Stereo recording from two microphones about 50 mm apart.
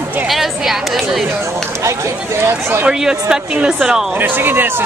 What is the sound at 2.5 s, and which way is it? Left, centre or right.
Speech, right.